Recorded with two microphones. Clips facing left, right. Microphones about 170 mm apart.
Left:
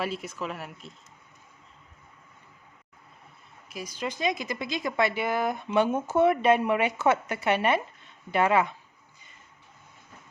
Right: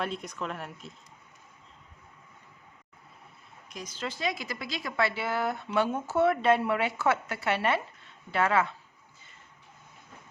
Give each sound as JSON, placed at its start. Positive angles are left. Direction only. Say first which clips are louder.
{"t": 0.0, "sound": "speech", "louder": "left 2 dB", "side_deg": 5}
{"t": 3.7, "sound": "speech", "louder": "left 3 dB", "side_deg": 10}